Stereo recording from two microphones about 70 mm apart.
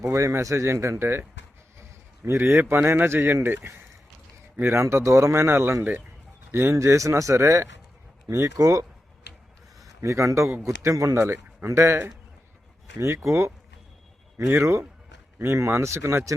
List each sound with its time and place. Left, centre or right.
0.0 s speech: right
2.2 s speech: right
6.7 s speech: right
8.5 s speech: right
10.0 s speech: right
14.6 s speech: right